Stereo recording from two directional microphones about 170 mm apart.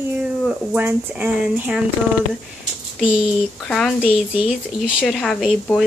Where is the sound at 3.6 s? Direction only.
5° left (ahead or behind).